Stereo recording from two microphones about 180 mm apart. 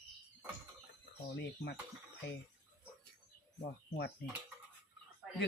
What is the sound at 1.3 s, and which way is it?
Speech, 65° left (ahead or behind).